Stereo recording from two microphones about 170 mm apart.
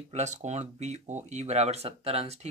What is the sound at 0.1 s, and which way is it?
Speech, 40° right (ahead or behind).